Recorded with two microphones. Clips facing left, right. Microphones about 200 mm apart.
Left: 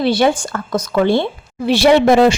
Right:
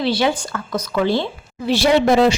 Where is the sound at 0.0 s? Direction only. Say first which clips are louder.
Left 4 dB; 50° left (ahead or behind).